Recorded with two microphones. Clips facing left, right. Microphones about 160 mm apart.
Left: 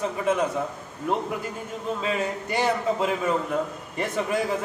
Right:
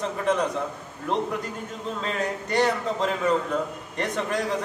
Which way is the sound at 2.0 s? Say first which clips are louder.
Even; 10° left (ahead or behind).